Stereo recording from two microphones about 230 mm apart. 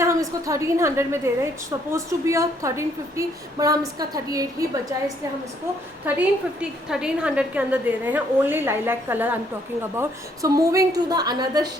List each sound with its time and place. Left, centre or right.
0.0 s a woman's voice: centre
6.1 s a woman's voice: centre